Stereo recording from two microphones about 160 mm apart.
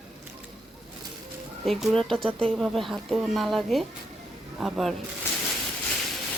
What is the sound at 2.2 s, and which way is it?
Speech, 35° right (ahead or behind).